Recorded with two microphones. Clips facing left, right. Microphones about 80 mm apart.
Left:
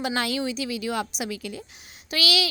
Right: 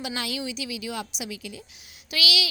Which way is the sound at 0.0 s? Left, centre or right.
Left.